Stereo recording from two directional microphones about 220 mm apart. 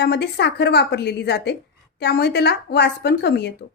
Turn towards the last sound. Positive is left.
turn(degrees=50)  # may be behind; listen again after turning